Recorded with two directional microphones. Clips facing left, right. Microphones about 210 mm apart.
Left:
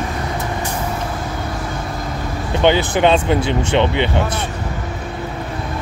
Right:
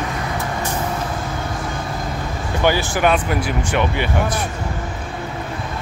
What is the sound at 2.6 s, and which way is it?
Speech, 20° left (ahead or behind).